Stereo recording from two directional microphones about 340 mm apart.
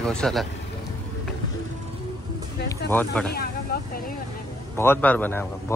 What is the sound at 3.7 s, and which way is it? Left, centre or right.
Vehicle, left.